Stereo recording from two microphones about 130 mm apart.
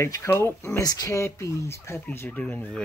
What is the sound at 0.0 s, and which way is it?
Speech, 20° left (ahead or behind).